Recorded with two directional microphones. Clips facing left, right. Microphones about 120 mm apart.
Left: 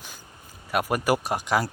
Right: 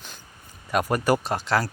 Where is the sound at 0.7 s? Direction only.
10° left (ahead or behind).